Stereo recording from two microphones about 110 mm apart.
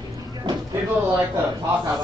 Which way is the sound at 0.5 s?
50° right (ahead or behind).